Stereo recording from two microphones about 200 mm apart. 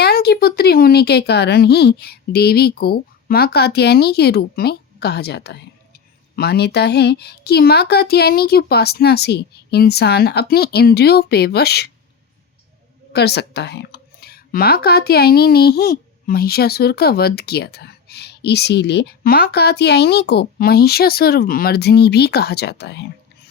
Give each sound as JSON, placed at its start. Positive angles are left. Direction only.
{"t": 0.0, "sound": "speech", "side_deg": 50}
{"t": 13.1, "sound": "speech", "side_deg": 55}